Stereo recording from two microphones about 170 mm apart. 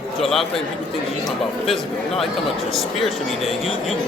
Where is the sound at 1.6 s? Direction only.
Centre (ahead or behind).